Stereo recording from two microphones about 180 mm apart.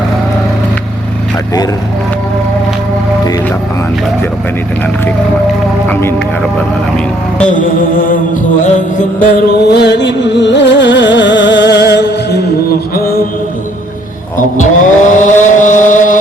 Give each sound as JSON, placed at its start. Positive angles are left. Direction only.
{"t": 5.9, "sound": "speech", "side_deg": 10}
{"t": 7.5, "sound": "vehicle", "side_deg": 50}
{"t": 9.6, "sound": "music", "side_deg": 70}
{"t": 14.3, "sound": "vehicle", "side_deg": 45}